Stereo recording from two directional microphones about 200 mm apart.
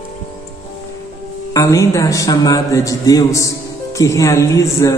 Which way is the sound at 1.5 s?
15° left (ahead or behind).